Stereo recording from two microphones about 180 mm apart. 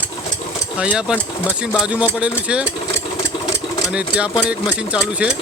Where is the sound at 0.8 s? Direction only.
5° right (ahead or behind).